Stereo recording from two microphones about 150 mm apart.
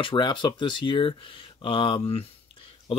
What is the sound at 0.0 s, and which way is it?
Speech, 30° left (ahead or behind).